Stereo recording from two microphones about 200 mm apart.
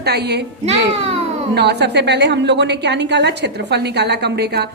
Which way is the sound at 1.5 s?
55° right (ahead or behind).